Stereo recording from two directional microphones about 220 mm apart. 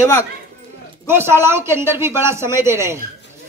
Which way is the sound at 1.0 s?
10° right (ahead or behind).